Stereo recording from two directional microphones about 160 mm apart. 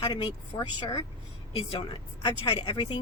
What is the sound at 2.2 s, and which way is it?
Speech, 30° left (ahead or behind).